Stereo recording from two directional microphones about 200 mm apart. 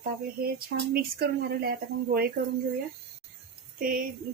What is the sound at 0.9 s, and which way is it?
Speech, 50° right (ahead or behind).